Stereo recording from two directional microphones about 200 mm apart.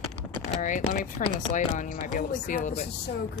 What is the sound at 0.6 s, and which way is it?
Speech, 40° left (ahead or behind).